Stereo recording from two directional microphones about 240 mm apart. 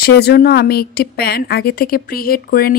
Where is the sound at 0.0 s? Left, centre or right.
Left.